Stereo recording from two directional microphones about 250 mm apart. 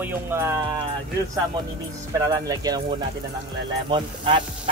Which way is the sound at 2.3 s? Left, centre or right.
Centre.